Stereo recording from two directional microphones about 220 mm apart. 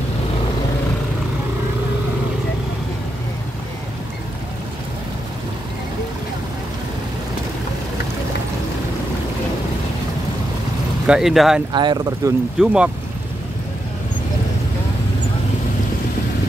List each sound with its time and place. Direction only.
11.1 s speech: centre (ahead or behind)
11.7 s speech: 20° right (ahead or behind)
12.5 s speech: 5° right (ahead or behind)